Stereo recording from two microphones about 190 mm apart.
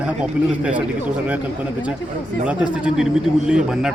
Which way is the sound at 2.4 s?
5° right (ahead or behind).